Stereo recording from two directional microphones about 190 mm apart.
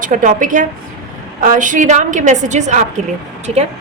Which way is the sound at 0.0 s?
45° right (ahead or behind).